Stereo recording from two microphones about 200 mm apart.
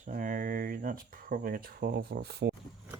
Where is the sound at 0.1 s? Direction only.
40° right (ahead or behind).